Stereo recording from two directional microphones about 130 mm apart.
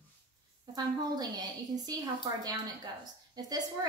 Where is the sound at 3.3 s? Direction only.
30° right (ahead or behind).